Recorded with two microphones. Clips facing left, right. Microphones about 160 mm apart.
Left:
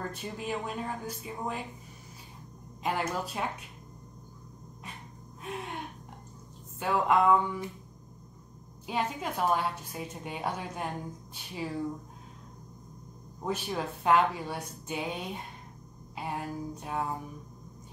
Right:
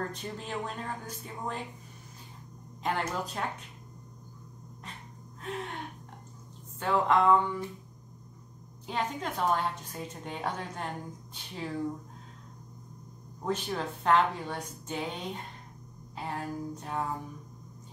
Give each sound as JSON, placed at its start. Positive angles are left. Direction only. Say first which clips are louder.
{"t": 0.1, "sound": "a woman's voice", "louder": "left 2 dB", "side_deg": 10}
{"t": 2.8, "sound": "a woman's voice", "louder": "even", "side_deg": 10}
{"t": 5.4, "sound": "a woman's voice", "louder": "right 1 dB", "side_deg": 10}
{"t": 6.8, "sound": "a woman's voice", "louder": "even", "side_deg": 10}
{"t": 8.8, "sound": "a woman's voice", "louder": "left 1 dB", "side_deg": 10}
{"t": 13.5, "sound": "a woman's voice", "louder": "right 1 dB", "side_deg": 10}